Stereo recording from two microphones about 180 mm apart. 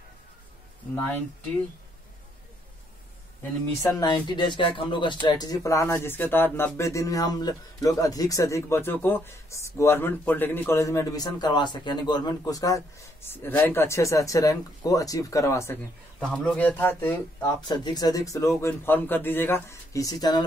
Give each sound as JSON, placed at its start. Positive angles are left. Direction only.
{"t": 0.9, "sound": "speech", "side_deg": 10}
{"t": 3.8, "sound": "speech", "side_deg": 25}
{"t": 16.2, "sound": "speech", "side_deg": 5}
{"t": 17.6, "sound": "speech", "side_deg": 25}